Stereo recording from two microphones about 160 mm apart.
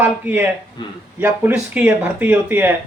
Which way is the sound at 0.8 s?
30° left (ahead or behind).